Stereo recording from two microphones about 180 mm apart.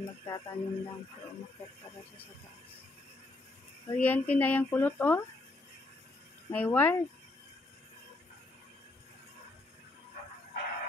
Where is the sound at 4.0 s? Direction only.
10° left (ahead or behind).